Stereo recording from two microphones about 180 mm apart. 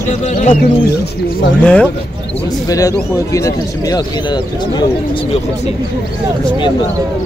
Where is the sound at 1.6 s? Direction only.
5° left (ahead or behind).